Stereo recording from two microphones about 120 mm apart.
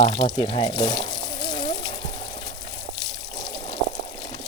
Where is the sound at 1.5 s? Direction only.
35° left (ahead or behind).